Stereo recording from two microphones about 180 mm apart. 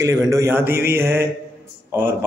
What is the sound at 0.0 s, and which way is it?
A man's voice, 15° right (ahead or behind).